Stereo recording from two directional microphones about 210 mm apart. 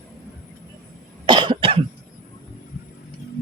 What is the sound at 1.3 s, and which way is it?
Cough, 20° right (ahead or behind).